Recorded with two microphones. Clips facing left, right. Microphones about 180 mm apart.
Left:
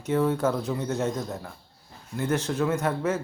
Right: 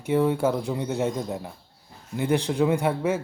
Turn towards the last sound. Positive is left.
turn(degrees=-10)  # may be behind; listen again after turning